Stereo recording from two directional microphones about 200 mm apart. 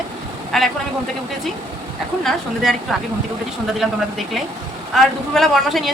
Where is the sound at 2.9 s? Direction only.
Centre (ahead or behind).